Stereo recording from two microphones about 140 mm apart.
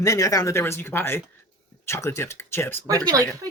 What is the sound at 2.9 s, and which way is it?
Speech, 25° right (ahead or behind).